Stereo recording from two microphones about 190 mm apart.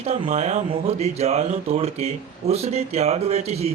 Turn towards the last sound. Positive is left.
turn(degrees=-35)  # may be behind; listen again after turning